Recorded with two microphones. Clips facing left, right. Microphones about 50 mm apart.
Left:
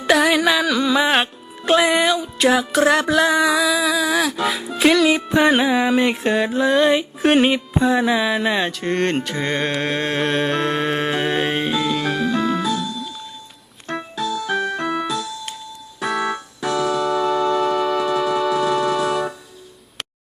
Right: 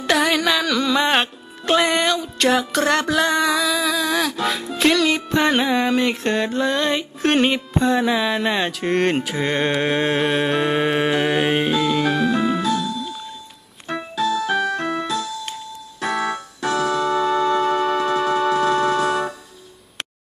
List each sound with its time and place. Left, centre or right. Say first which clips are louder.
0.1 s music: left 3 dB; centre
13.8 s keyboard: right 3 dB; centre
14.6 s music: even; centre
16.0 s keyboard: left 1 dB; centre
16.9 s organ: even; right
17.2 s music: even; right; by 18.8 s centre